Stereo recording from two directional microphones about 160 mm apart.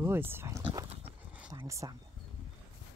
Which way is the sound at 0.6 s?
30° right (ahead or behind).